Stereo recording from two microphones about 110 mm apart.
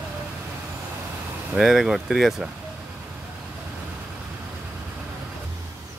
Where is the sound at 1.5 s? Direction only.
5° right (ahead or behind).